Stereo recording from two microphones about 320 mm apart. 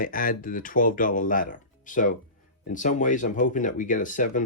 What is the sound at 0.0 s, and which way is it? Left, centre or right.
Speech, left.